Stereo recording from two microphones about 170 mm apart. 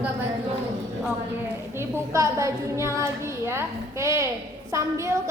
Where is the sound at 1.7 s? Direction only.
15° right (ahead or behind).